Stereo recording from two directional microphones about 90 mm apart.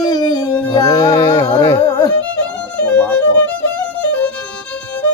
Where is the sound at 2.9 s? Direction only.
15° left (ahead or behind).